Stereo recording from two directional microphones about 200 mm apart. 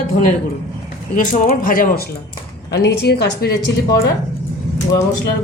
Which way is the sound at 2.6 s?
55° left (ahead or behind).